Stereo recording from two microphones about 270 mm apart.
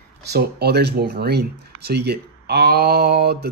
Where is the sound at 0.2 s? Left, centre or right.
Right.